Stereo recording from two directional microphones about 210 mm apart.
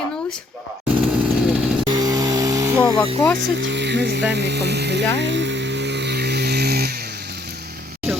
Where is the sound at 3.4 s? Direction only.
55° right (ahead or behind).